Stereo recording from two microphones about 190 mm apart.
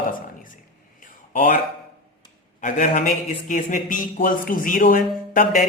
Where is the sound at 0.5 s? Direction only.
45° left (ahead or behind).